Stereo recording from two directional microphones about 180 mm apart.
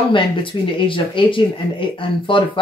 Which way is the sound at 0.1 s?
30° left (ahead or behind).